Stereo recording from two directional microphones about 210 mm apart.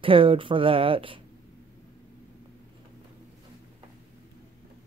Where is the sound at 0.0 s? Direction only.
25° right (ahead or behind).